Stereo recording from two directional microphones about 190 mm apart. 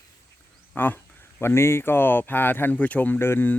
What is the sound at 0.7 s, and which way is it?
Speech, 10° left (ahead or behind).